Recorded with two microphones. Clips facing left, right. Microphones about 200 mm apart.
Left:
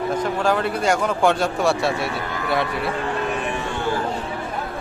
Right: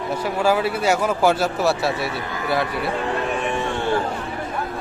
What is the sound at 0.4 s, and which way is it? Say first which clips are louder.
Speech: right 3 dB; 5° right (ahead or behind).